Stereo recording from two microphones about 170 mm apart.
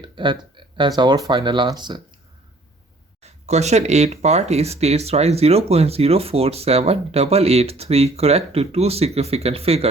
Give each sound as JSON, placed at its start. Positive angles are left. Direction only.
{"t": 0.0, "sound": "speech", "side_deg": -25}
{"t": 3.2, "sound": "speech", "side_deg": -40}